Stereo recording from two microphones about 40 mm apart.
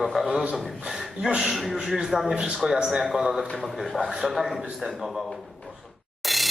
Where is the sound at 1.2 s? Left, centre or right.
Centre.